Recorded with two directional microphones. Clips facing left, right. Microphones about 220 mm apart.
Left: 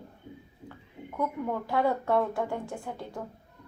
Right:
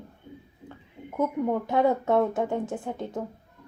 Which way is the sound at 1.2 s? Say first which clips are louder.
Right 5 dB; 20° right (ahead or behind).